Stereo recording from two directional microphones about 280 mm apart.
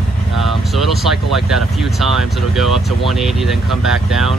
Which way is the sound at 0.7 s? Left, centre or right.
Centre.